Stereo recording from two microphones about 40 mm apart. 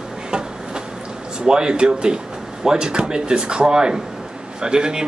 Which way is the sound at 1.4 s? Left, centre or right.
Centre.